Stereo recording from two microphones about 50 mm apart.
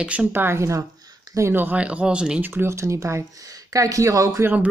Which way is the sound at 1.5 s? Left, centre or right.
Right.